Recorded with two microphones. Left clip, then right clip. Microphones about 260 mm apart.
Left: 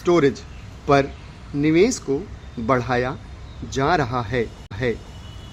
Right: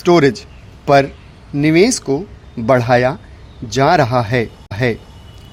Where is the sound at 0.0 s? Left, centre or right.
Right.